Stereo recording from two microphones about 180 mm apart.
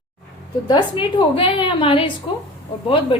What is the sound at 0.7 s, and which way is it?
A woman's voice, 25° left (ahead or behind).